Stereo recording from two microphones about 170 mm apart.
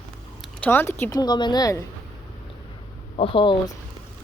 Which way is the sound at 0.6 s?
10° left (ahead or behind).